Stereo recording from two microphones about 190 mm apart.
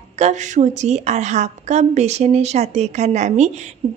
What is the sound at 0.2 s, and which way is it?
A woman's voice, 40° right (ahead or behind).